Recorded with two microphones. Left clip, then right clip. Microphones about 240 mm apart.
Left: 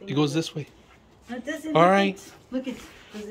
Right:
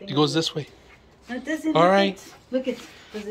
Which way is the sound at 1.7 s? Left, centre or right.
Centre.